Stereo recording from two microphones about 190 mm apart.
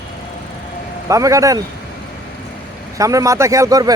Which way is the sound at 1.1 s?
15° right (ahead or behind).